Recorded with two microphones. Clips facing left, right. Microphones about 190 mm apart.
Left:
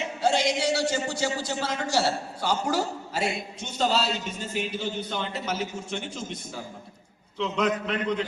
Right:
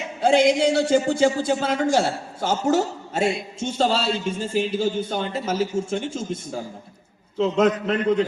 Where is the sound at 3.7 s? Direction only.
30° right (ahead or behind).